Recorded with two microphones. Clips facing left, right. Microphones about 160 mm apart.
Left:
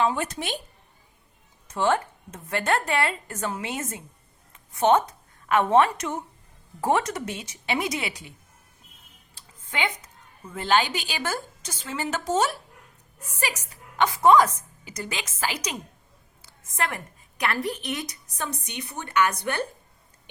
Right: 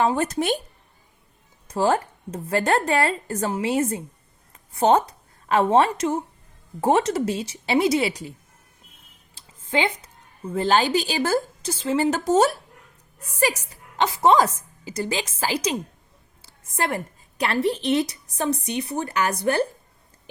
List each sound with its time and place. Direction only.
0.0 s speech: 40° right (ahead or behind)
1.6 s a woman's voice: 35° right (ahead or behind)
9.6 s a woman's voice: 30° right (ahead or behind)
14.0 s a woman's voice: 25° right (ahead or behind)
16.7 s a woman's voice: 30° right (ahead or behind)